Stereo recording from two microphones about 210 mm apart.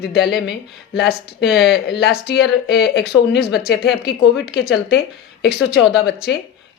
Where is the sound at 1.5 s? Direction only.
Centre (ahead or behind).